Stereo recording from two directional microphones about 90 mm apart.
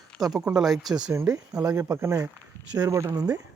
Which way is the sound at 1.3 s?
40° right (ahead or behind).